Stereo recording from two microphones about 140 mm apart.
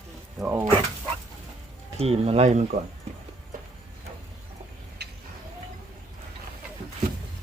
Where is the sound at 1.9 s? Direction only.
45° right (ahead or behind).